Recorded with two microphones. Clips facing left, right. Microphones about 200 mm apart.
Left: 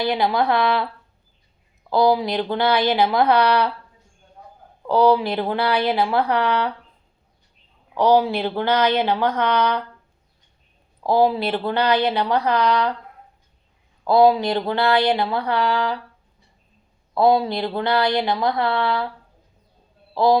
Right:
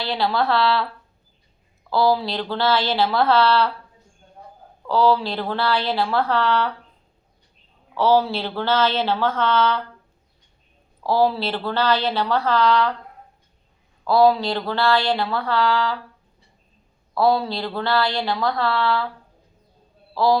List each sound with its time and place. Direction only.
0.0 s speech: 15° left (ahead or behind)
1.9 s speech: 15° left (ahead or behind)
4.9 s speech: 20° left (ahead or behind)
7.9 s speech: 15° left (ahead or behind)
11.0 s speech: 15° left (ahead or behind)
14.0 s speech: 20° left (ahead or behind)
17.2 s speech: 20° left (ahead or behind)
20.1 s speech: 20° left (ahead or behind)